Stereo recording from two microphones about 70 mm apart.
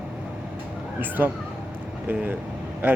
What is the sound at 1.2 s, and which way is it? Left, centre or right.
Speech, right.